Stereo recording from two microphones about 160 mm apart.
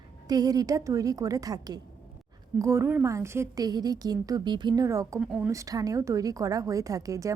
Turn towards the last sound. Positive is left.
turn(degrees=-20)  # may be behind; listen again after turning